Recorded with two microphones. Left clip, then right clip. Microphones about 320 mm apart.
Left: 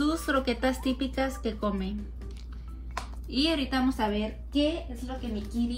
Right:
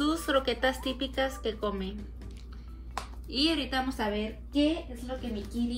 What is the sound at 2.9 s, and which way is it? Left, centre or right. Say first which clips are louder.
A woman's voice: left 1 dB; centre.